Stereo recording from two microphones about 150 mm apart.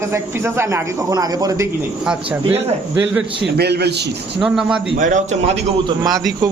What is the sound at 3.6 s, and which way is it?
Speech, 90° right.